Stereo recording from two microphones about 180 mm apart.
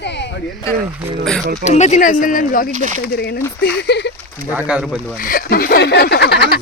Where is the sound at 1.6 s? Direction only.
40° left (ahead or behind).